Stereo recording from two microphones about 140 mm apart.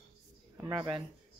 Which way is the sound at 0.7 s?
35° right (ahead or behind).